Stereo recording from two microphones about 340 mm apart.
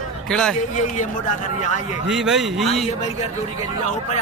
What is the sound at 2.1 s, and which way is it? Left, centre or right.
Speech, centre.